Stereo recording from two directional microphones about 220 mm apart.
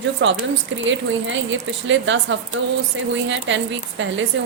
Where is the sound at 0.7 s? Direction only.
60° right (ahead or behind).